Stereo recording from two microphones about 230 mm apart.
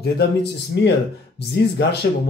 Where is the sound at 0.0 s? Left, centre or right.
Left.